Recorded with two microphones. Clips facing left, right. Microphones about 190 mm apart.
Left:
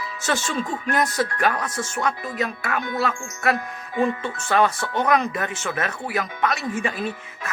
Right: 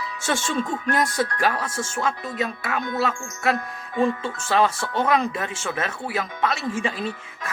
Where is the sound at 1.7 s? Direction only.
25° right (ahead or behind).